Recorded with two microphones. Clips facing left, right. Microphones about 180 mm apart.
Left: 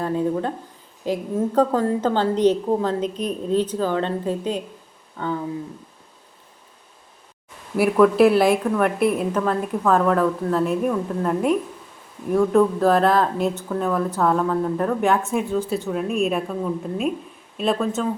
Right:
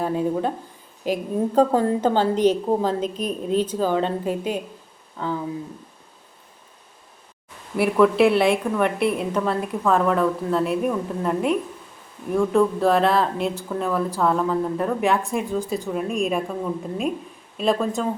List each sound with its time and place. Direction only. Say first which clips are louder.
0.0 s a woman's voice: even; 15° right (ahead or behind)
7.8 s a woman's voice: left 2 dB; centre (ahead or behind)